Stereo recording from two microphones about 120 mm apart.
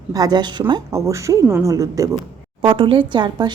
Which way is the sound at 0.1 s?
35° right (ahead or behind).